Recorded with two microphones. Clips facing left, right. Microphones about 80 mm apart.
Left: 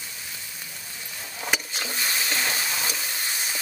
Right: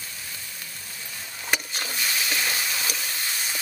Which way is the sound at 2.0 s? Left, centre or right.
Left.